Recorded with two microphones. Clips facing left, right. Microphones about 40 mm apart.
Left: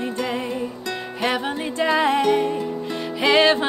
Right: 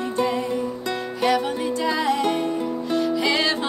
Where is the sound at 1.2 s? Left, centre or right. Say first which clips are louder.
Right 2 dB; left.